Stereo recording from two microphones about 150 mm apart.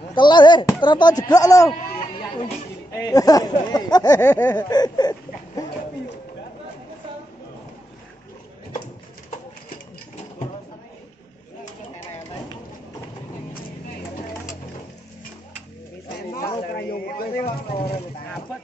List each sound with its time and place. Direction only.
0.1 s speech: 30° left (ahead or behind)
2.1 s music: 35° left (ahead or behind)
2.9 s speech: 25° left (ahead or behind)
4.2 s a sound: 15° left (ahead or behind)
4.6 s speech: 25° left (ahead or behind)
16.3 s a sound: 75° left (ahead or behind)